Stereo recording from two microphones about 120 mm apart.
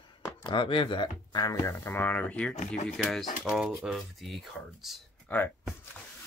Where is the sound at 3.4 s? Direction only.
5° right (ahead or behind).